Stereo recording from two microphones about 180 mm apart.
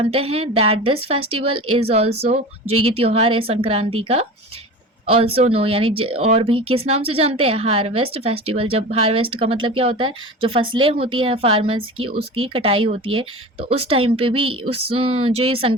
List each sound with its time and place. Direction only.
0.0 s speech: 30° right (ahead or behind)